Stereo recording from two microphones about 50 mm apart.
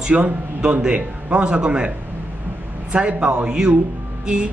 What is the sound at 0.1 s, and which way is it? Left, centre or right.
Speech, right.